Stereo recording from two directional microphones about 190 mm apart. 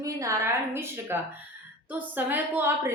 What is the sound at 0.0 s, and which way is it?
A woman's voice, 15° right (ahead or behind).